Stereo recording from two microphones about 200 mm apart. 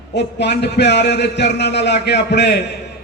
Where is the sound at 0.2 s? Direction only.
60° left (ahead or behind).